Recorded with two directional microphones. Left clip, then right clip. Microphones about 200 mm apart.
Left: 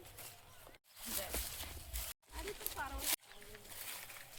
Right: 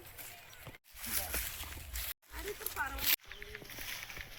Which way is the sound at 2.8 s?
50° left (ahead or behind).